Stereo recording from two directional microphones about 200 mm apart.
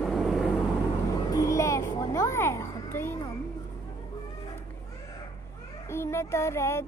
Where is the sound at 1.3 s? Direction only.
15° left (ahead or behind).